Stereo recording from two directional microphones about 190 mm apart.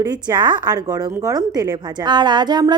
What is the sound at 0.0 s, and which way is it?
A woman's voice, 20° right (ahead or behind).